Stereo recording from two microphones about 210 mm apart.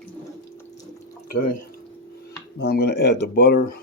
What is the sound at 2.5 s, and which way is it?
Speech, 50° left (ahead or behind).